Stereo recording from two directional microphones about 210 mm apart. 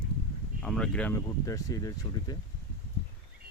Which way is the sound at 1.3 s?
15° left (ahead or behind).